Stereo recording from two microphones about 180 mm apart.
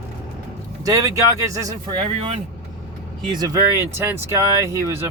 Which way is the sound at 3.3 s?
20° right (ahead or behind).